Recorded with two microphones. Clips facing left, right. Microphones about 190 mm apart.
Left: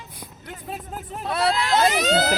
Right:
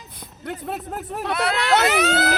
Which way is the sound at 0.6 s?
65° right (ahead or behind).